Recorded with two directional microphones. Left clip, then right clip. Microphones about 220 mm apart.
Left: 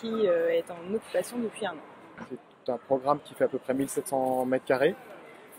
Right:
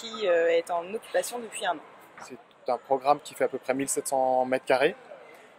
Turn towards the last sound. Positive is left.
turn(degrees=-45)  # may be behind; listen again after turning